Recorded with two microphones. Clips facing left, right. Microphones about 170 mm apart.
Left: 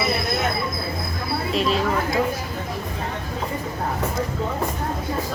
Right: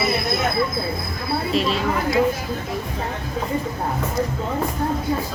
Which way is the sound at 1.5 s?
Centre (ahead or behind).